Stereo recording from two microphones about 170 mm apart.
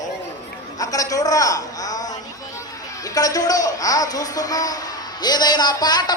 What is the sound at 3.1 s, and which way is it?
A man's voice, 20° left (ahead or behind).